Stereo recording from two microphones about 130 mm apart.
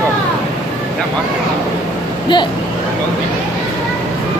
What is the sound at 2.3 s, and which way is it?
Speech, 35° left (ahead or behind).